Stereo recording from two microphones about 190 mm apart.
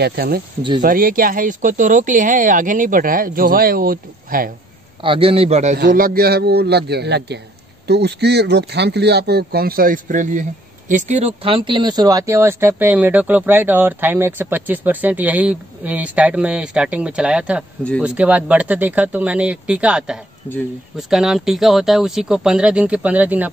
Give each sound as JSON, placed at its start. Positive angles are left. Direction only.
{"t": 0.0, "sound": "speech", "side_deg": -55}
{"t": 5.0, "sound": "a man's voice", "side_deg": -30}
{"t": 5.9, "sound": "speech", "side_deg": -50}